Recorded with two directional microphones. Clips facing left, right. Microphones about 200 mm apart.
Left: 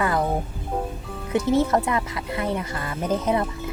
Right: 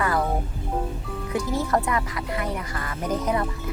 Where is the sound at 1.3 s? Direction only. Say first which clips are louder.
Left 5 dB; 25° left (ahead or behind).